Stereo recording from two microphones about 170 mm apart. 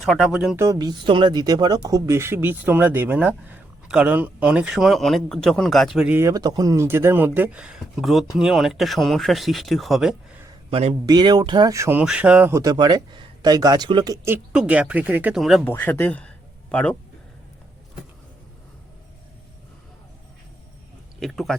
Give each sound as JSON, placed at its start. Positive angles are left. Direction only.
{"t": 0.0, "sound": "speech", "side_deg": 0}
{"t": 0.5, "sound": "speech", "side_deg": -20}
{"t": 6.1, "sound": "speech", "side_deg": -20}
{"t": 10.7, "sound": "speech", "side_deg": -35}
{"t": 11.0, "sound": "speech", "side_deg": -25}
{"t": 14.3, "sound": "speech", "side_deg": -5}
{"t": 15.6, "sound": "speech", "side_deg": 10}
{"t": 21.2, "sound": "speech", "side_deg": 0}